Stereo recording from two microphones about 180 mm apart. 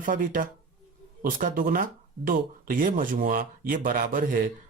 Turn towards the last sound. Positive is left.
turn(degrees=-50)  # may be behind; listen again after turning